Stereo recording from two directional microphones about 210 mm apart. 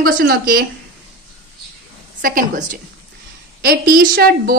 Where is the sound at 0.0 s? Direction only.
45° right (ahead or behind).